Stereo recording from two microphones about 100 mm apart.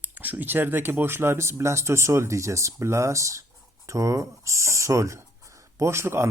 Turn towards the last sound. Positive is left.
turn(degrees=-25)  # may be behind; listen again after turning